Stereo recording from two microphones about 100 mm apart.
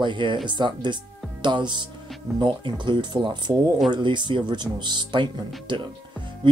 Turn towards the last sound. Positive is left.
turn(degrees=-55)  # may be behind; listen again after turning